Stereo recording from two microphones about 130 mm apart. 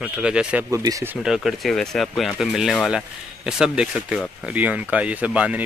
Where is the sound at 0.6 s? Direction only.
25° right (ahead or behind).